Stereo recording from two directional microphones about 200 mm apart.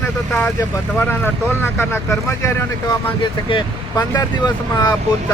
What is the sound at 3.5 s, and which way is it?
Speech, 25° left (ahead or behind).